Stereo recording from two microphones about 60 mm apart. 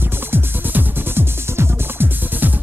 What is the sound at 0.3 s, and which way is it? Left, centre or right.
Music, right.